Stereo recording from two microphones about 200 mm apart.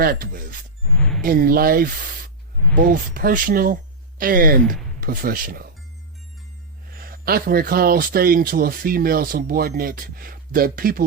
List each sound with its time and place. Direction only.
0.0 s speech: 45° right (ahead or behind)
0.9 s music: 5° left (ahead or behind)
1.2 s speech: 45° right (ahead or behind)
6.9 s speech: 45° right (ahead or behind)